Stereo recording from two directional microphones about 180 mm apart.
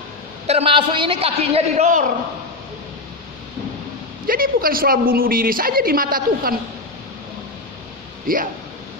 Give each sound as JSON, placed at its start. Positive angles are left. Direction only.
{"t": 0.5, "sound": "a man's voice", "side_deg": -35}
{"t": 4.3, "sound": "a woman's voice", "side_deg": -55}
{"t": 8.3, "sound": "a woman's voice", "side_deg": -50}